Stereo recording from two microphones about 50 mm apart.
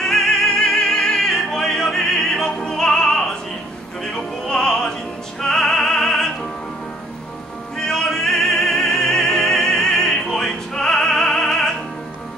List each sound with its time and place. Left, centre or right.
0.0 s opera: centre
5.4 s music: centre
7.7 s opera: centre